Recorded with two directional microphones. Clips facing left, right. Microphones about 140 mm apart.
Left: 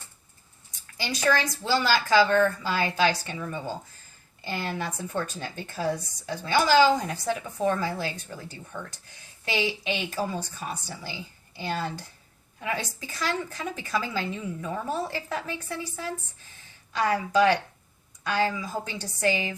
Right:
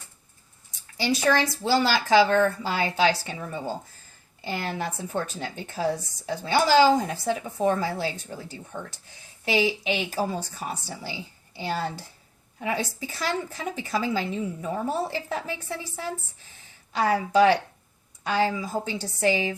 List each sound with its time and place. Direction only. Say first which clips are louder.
0.9 s a woman's voice: right 3 dB; 30° right (ahead or behind)
17.0 s speech: right 2 dB; 25° right (ahead or behind)